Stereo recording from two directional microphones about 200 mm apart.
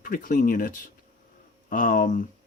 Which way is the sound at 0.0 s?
45° left (ahead or behind).